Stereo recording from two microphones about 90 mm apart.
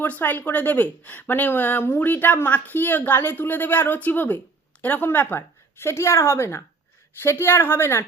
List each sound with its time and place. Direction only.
0.0 s speech: 20° left (ahead or behind)